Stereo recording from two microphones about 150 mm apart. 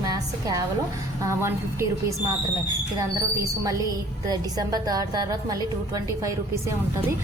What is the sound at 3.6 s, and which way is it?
A woman's voice, 20° right (ahead or behind).